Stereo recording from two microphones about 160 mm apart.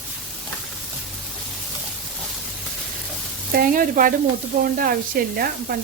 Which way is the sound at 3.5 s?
60° right (ahead or behind).